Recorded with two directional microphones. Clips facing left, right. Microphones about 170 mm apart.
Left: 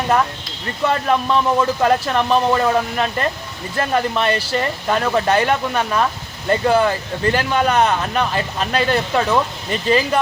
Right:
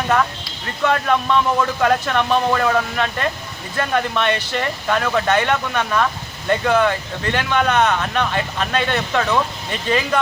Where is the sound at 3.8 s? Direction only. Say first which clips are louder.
Left 1 dB; 35° left (ahead or behind).